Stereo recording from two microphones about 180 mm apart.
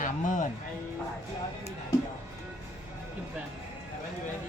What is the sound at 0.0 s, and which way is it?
Music, 45° left (ahead or behind).